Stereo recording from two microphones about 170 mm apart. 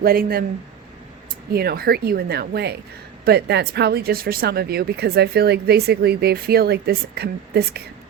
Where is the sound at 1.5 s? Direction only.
65° right (ahead or behind).